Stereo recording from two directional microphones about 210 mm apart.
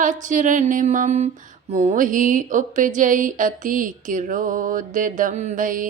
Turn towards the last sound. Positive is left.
turn(degrees=-40)  # may be behind; listen again after turning